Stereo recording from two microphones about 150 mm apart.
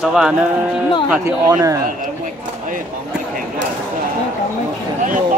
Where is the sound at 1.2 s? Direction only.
20° right (ahead or behind).